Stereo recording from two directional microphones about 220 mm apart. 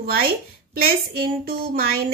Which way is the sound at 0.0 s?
45° right (ahead or behind).